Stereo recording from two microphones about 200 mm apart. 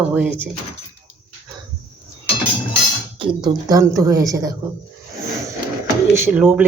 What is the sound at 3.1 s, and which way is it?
A woman's voice, 25° right (ahead or behind).